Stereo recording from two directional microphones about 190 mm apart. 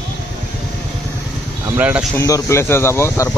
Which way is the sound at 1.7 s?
5° right (ahead or behind).